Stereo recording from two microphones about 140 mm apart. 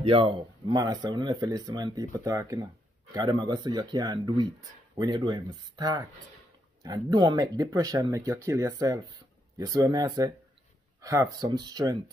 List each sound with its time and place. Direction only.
0.0 s speech: 40° right (ahead or behind)
7.1 s speech: 30° right (ahead or behind)